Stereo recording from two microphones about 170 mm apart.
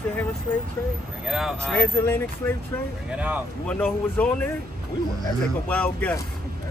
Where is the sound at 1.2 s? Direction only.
Centre (ahead or behind).